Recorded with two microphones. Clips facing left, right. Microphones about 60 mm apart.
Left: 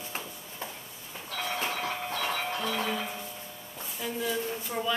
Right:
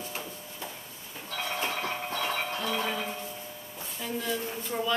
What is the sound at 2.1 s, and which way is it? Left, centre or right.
Music, right.